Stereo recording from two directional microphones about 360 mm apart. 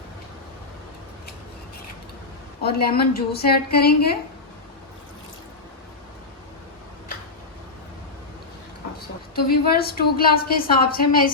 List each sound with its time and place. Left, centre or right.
2.7 s a woman's voice: left
9.3 s a woman's voice: left